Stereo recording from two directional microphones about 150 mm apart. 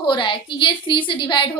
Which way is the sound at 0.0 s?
30° left (ahead or behind).